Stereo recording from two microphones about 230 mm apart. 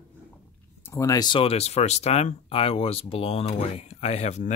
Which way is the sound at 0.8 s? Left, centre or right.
Centre.